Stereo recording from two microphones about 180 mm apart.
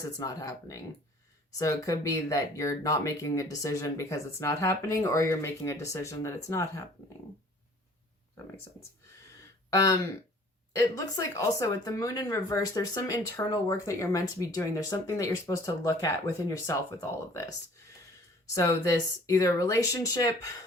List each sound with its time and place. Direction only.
0.2 s speech: 20° left (ahead or behind)
9.6 s speech: 20° left (ahead or behind)
18.5 s speech: 20° left (ahead or behind)